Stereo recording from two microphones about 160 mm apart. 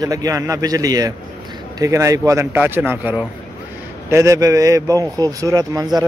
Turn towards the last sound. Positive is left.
turn(degrees=-20)  # may be behind; listen again after turning